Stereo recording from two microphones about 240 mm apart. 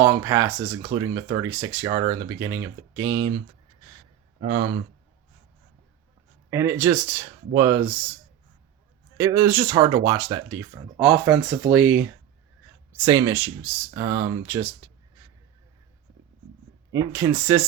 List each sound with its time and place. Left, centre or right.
0.0 s speech: centre
4.4 s speech: right
6.5 s speech: centre
9.1 s speech: centre
13.1 s speech: centre
16.9 s speech: centre